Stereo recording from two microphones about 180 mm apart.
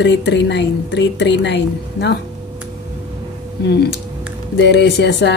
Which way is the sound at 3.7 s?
65° left (ahead or behind).